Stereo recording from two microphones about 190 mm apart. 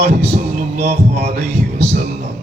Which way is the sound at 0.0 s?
60° right (ahead or behind).